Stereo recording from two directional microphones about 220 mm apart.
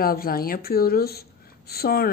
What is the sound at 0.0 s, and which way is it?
Speech, 40° left (ahead or behind).